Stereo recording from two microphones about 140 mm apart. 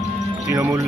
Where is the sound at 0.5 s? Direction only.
20° right (ahead or behind).